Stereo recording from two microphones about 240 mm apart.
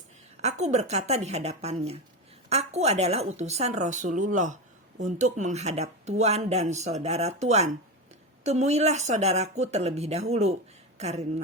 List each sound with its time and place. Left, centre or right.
0.7 s speech: right